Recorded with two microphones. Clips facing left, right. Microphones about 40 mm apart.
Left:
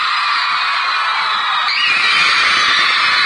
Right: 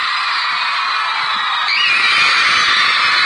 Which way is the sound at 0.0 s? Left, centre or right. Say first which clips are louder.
Left 2 dB; centre.